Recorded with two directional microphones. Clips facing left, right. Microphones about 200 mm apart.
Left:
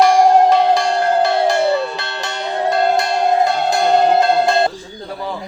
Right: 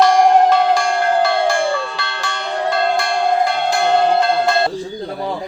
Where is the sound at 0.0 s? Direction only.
15° left (ahead or behind).